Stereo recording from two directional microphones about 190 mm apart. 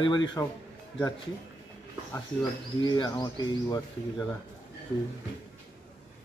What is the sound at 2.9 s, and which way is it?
Speech, 20° left (ahead or behind).